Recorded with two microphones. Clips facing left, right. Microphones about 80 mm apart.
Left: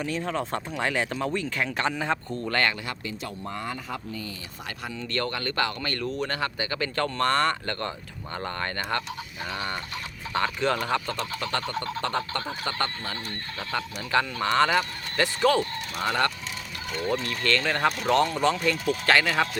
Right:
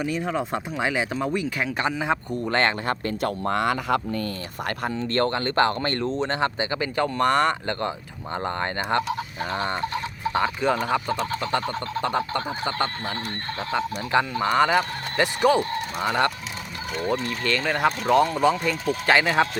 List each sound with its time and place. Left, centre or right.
0.0 s speech: centre
2.8 s speech: right
4.9 s speech: right
9.4 s a sound: right
10.3 s speech: centre
16.9 s speech: centre